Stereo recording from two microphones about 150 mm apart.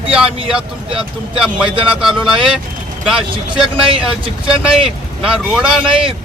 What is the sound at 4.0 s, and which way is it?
A man's voice, 5° right (ahead or behind).